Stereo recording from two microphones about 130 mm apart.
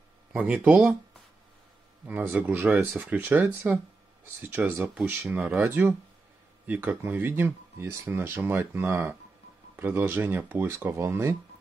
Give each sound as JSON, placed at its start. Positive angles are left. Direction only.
{"t": 0.3, "sound": "speech", "side_deg": -15}
{"t": 2.0, "sound": "speech", "side_deg": -15}